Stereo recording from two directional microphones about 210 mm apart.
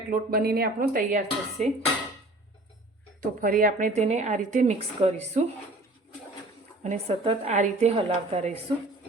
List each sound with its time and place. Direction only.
0.1 s speech: 45° right (ahead or behind)
3.2 s a woman's voice: 40° right (ahead or behind)
6.8 s a woman's voice: 30° right (ahead or behind)